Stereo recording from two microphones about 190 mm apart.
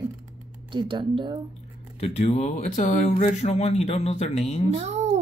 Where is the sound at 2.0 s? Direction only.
35° left (ahead or behind).